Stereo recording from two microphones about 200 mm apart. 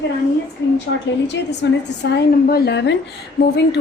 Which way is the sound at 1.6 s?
65° left (ahead or behind).